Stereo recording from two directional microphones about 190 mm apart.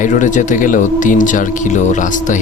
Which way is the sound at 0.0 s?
40° left (ahead or behind).